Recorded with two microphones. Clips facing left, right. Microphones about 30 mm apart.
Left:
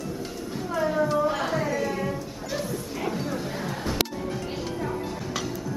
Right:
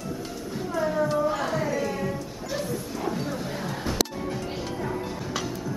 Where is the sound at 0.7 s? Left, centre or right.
Centre.